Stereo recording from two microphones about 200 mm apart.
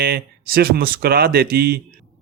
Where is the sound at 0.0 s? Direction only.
50° right (ahead or behind).